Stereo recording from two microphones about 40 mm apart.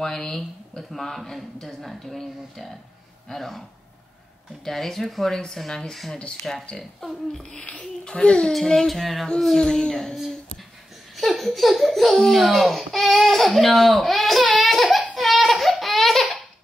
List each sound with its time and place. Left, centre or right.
0.0 s speech: centre
0.7 s speech: centre
4.6 s speech: centre
6.5 s speech: centre
8.0 s a child's voice: left
8.8 s speech: centre
9.6 s speech: centre
11.1 s speech: centre
15.1 s baby cry: centre